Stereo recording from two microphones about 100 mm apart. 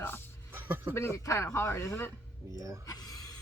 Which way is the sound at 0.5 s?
20° right (ahead or behind).